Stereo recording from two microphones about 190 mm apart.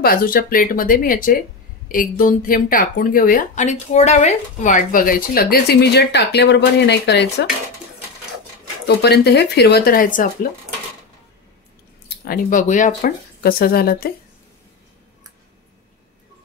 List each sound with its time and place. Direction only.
0.0 s speech: 50° left (ahead or behind)
8.8 s speech: 60° left (ahead or behind)
12.1 s speech: 45° left (ahead or behind)